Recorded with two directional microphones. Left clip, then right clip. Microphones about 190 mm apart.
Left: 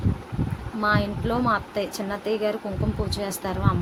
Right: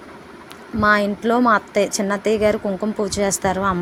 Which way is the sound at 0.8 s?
40° right (ahead or behind).